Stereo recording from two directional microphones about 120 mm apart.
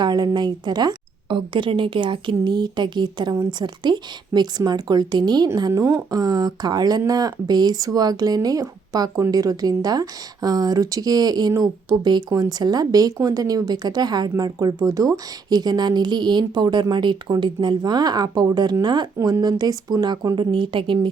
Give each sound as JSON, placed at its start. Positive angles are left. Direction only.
{"t": 0.0, "sound": "speech", "side_deg": -35}